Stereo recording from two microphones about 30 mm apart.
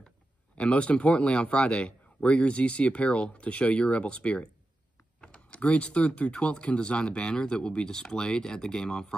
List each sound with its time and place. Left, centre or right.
0.6 s speech: left